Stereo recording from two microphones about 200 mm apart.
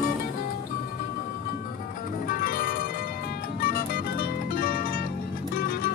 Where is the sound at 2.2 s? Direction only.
45° left (ahead or behind).